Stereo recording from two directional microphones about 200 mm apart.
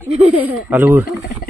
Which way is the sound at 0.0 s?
10° right (ahead or behind).